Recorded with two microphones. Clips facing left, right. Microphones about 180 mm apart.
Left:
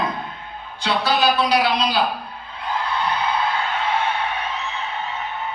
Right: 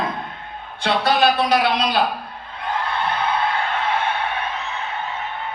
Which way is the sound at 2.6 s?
55° right (ahead or behind).